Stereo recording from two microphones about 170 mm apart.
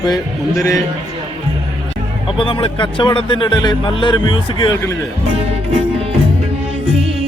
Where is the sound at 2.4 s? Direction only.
30° left (ahead or behind).